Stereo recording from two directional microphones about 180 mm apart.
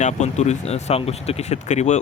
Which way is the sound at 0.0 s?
40° left (ahead or behind).